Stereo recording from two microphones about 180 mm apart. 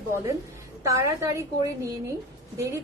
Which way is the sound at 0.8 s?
15° right (ahead or behind).